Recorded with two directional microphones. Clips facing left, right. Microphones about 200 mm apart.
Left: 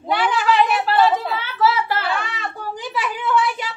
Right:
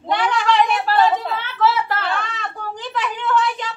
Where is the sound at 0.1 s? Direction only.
5° left (ahead or behind).